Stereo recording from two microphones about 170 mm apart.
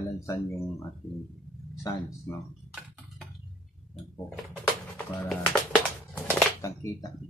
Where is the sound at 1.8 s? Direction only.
20° left (ahead or behind).